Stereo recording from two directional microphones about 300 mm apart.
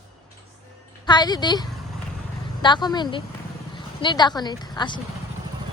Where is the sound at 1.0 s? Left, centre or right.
Centre.